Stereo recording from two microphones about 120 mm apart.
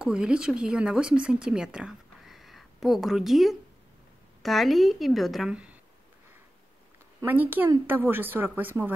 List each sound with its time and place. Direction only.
0.0 s a woman's voice: 5° right (ahead or behind)
7.2 s speech: 15° right (ahead or behind)